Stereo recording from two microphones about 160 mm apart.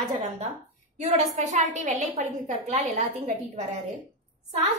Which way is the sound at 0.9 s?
45° right (ahead or behind).